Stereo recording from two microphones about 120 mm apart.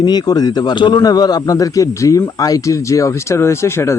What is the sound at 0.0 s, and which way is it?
Speech, 35° left (ahead or behind).